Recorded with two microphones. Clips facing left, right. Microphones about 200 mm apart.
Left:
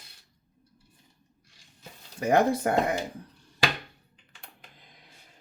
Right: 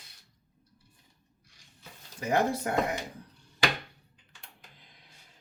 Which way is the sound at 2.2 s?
55° left (ahead or behind).